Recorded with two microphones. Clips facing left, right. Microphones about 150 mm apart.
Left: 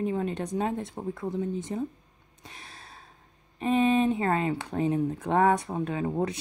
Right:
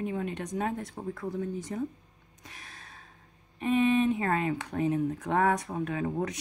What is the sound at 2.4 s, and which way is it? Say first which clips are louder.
Gasp: left 2 dB; 30° left (ahead or behind).